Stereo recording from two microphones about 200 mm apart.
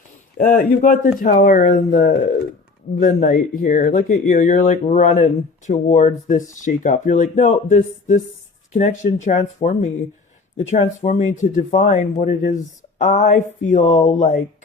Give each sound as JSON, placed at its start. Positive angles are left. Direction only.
{"t": 0.3, "sound": "speech", "side_deg": 45}